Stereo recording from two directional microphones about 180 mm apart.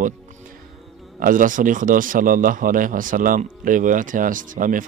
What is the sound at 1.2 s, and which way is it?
Speech, 50° right (ahead or behind).